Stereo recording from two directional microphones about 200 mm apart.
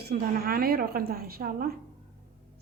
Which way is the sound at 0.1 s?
50° right (ahead or behind).